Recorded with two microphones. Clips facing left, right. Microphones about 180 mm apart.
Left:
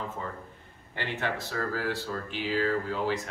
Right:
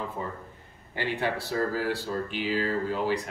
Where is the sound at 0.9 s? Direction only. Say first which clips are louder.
Right 3 dB; 15° right (ahead or behind).